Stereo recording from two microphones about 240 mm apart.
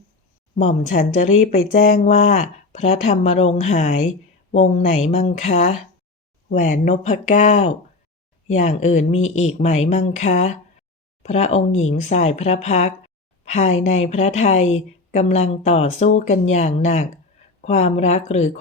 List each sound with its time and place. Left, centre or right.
0.5 s a woman's voice: left